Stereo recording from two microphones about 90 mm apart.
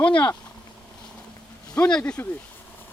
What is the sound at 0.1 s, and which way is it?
Speech, 55° left (ahead or behind).